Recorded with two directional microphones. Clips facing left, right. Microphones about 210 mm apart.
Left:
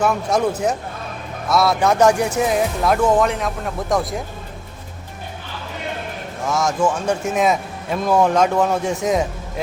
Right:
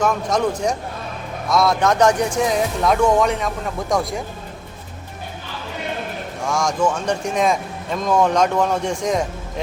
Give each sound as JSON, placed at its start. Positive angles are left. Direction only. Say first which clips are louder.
{"t": 0.0, "sound": "speech", "louder": "left 1 dB", "side_deg": 10}
{"t": 6.5, "sound": "speech", "louder": "left 1 dB", "side_deg": 5}